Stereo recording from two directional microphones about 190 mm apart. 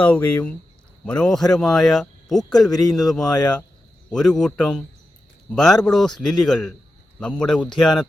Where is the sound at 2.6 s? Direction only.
20° left (ahead or behind).